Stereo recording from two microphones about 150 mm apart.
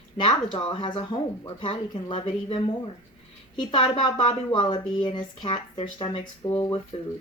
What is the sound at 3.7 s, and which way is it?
Speech, 35° left (ahead or behind).